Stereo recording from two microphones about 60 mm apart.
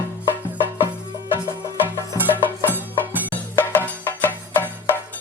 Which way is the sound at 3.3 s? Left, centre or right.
Left.